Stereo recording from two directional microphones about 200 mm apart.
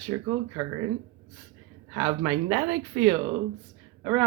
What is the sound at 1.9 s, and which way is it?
Speech, 20° right (ahead or behind).